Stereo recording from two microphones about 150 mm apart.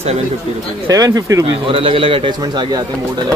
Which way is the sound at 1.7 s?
35° right (ahead or behind).